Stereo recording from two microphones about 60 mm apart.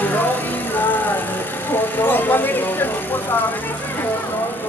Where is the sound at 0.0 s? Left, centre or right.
Left.